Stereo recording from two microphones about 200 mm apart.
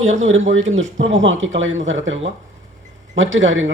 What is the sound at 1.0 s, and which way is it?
Speech, 70° right (ahead or behind).